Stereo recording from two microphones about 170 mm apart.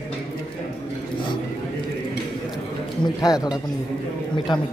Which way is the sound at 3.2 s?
20° left (ahead or behind).